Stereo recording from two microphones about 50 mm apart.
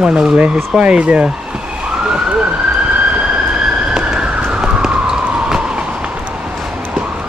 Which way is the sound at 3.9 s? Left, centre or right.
Centre.